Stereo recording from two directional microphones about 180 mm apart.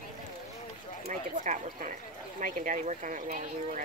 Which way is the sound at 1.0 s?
40° right (ahead or behind).